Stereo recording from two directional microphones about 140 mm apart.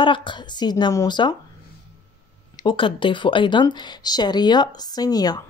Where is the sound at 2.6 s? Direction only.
35° left (ahead or behind).